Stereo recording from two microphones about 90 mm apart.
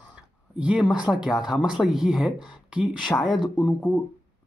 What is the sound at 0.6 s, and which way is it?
Speech, 10° right (ahead or behind).